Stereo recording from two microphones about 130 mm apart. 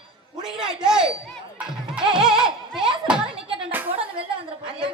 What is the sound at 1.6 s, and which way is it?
Music, 5° right (ahead or behind).